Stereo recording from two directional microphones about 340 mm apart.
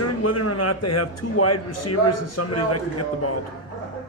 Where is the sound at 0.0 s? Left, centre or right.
Left.